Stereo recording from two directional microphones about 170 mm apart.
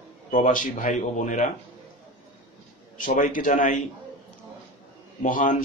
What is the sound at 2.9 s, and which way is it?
Speech, 50° left (ahead or behind).